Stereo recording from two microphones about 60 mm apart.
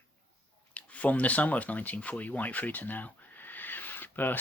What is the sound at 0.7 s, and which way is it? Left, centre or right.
Speech, left.